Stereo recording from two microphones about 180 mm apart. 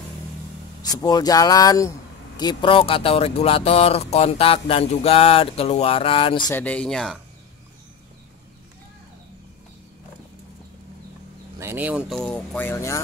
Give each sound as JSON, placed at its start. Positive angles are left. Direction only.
{"t": 0.8, "sound": "speech", "side_deg": 20}
{"t": 6.5, "sound": "speech", "side_deg": 10}
{"t": 11.6, "sound": "speech", "side_deg": -10}
{"t": 12.2, "sound": "speech", "side_deg": 10}